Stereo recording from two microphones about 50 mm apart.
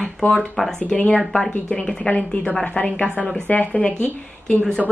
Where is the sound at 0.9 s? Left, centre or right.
Centre.